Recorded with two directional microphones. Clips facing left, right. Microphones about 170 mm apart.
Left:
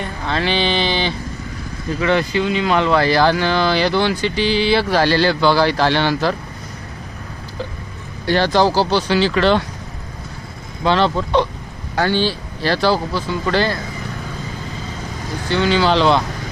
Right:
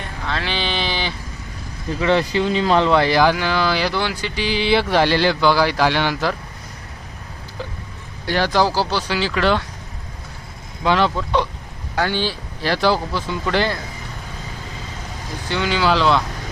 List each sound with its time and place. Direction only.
0.3 s a sound: centre (ahead or behind)
2.0 s speech: 30° right (ahead or behind)
2.9 s speech: 20° right (ahead or behind)
8.3 s speech: 10° right (ahead or behind)
10.8 s speech: 10° right (ahead or behind)
15.4 s speech: 10° right (ahead or behind)